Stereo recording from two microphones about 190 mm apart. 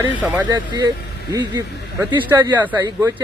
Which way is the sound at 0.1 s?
10° right (ahead or behind).